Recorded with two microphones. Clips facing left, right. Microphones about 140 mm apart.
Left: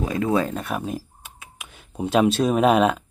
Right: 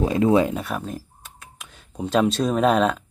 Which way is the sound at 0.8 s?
10° left (ahead or behind).